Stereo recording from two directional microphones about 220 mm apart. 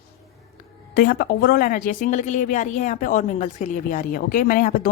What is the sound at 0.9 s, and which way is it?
A woman's voice, 45° left (ahead or behind).